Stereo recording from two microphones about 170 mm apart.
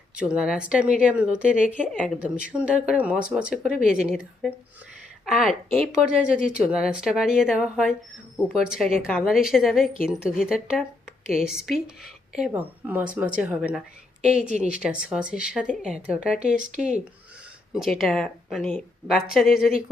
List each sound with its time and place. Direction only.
0.2 s speech: 5° right (ahead or behind)
1.9 s a woman's voice: 5° left (ahead or behind)
2.1 s a woman's voice: 10° right (ahead or behind)
14.4 s speech: 40° right (ahead or behind)
14.7 s speech: 5° right (ahead or behind)
17.7 s speech: centre (ahead or behind)